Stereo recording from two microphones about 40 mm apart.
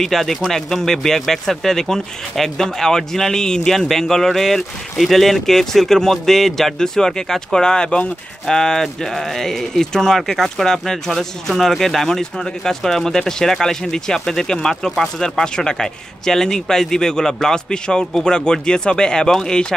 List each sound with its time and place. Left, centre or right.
0.0 s speech: centre